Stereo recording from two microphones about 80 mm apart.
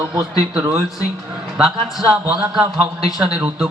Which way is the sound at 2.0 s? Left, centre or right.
Centre.